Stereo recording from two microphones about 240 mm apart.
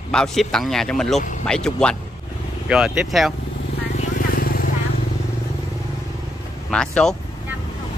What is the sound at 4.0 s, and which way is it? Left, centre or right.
Vehicle, left.